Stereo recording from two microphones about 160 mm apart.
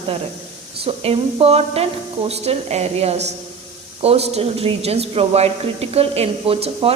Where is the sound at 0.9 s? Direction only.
35° right (ahead or behind).